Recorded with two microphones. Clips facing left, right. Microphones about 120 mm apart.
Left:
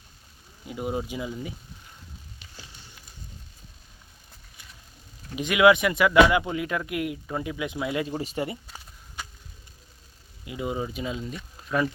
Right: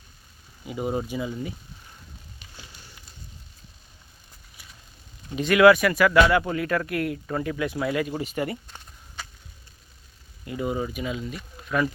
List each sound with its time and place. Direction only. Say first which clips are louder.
0.7 s speech: right 2 dB; centre (ahead or behind)
1.0 s speech: right 3 dB; 15° left (ahead or behind)
5.4 s speech: right 3 dB; 15° left (ahead or behind)
8.2 s speech: right 1 dB; 30° left (ahead or behind)
8.6 s a sound: even; 5° left (ahead or behind)
10.4 s speech: right 2 dB; 15° left (ahead or behind)
10.9 s speech: right 1 dB; 25° left (ahead or behind)
11.6 s a sound: right 1 dB; 25° left (ahead or behind)